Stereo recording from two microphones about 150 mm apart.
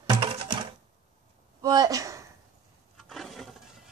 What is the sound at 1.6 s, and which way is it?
Speech, 25° right (ahead or behind).